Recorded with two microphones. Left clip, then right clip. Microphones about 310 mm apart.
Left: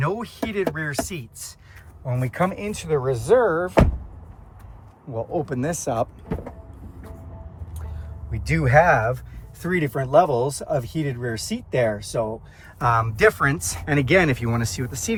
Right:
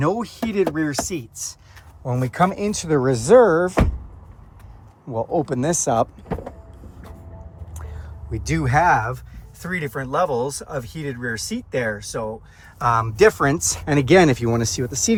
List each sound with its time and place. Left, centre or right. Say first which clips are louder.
0.0 s speech: right 4 dB; centre
5.1 s speech: right 4 dB; centre
8.3 s speech: left 2 dB; centre